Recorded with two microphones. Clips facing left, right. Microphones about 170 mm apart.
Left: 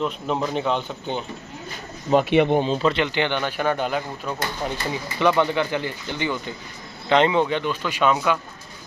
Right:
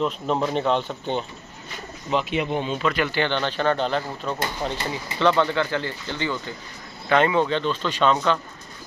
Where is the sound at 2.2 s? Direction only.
65° left (ahead or behind).